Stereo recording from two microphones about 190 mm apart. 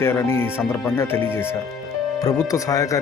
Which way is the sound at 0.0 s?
10° left (ahead or behind).